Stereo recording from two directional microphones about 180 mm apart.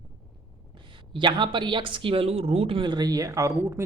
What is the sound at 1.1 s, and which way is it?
A woman's voice, 25° right (ahead or behind).